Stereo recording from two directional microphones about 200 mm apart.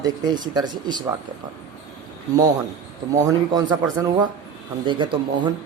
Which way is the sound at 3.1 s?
15° right (ahead or behind).